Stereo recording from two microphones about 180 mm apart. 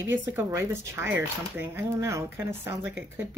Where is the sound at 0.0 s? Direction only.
15° right (ahead or behind).